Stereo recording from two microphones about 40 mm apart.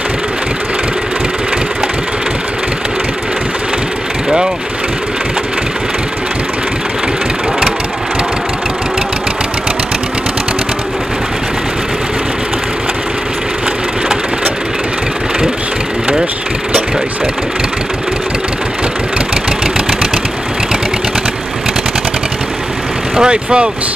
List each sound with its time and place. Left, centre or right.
23.1 s vehicle: right